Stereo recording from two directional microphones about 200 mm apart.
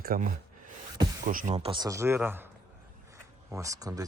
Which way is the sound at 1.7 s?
20° right (ahead or behind).